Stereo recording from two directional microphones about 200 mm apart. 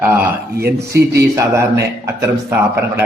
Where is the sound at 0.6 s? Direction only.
50° right (ahead or behind).